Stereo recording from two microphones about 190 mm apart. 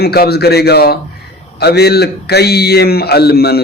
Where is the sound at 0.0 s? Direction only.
55° left (ahead or behind).